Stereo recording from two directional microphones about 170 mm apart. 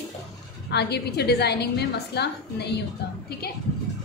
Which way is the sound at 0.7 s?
75° left (ahead or behind).